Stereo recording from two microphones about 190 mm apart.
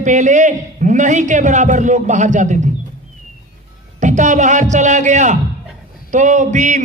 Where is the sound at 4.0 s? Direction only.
40° right (ahead or behind).